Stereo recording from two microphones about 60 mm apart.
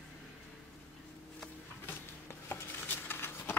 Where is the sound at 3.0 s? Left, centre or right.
Left.